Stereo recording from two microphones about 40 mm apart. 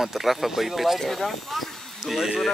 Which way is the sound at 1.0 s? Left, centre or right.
Centre.